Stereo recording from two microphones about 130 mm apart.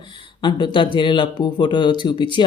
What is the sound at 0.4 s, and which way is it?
Speech, 35° left (ahead or behind).